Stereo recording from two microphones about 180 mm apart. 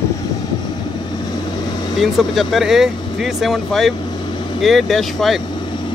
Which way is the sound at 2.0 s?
Centre (ahead or behind).